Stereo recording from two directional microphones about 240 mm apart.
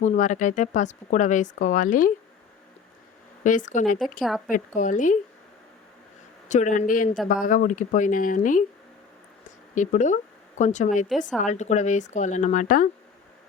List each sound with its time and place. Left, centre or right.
0.0 s speech: left
3.4 s speech: left
4.2 s speech: centre
4.5 s speech: left
6.5 s speech: left
9.7 s a woman's voice: left